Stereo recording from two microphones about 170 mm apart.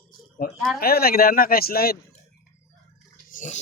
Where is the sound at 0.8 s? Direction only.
65° left (ahead or behind).